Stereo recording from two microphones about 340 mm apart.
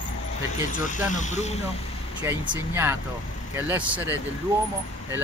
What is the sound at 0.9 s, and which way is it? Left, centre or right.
Speech, left.